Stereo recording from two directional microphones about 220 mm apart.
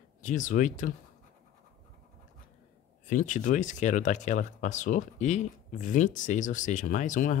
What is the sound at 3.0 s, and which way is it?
Speech, 35° left (ahead or behind).